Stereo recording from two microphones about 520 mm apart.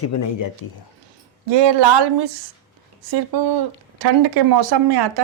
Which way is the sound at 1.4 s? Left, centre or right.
Right.